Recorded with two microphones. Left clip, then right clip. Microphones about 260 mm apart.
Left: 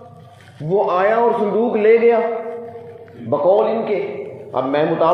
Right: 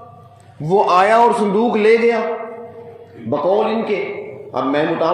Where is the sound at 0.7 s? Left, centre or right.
Right.